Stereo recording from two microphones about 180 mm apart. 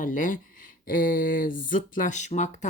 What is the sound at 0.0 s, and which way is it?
Speech, 45° left (ahead or behind).